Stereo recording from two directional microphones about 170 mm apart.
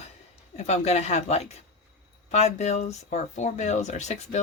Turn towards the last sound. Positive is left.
turn(degrees=40)  # may be behind; listen again after turning